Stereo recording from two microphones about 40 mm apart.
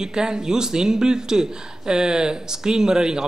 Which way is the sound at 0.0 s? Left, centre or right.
Centre.